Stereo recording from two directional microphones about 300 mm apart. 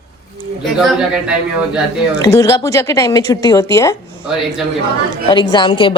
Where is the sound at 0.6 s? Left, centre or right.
Centre.